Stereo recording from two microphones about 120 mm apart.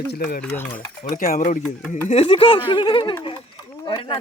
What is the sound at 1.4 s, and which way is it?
Speech, 90° left.